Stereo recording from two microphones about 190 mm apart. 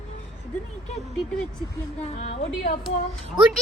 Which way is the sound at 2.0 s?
40° left (ahead or behind).